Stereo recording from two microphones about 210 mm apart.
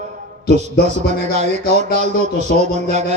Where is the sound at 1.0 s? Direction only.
35° right (ahead or behind).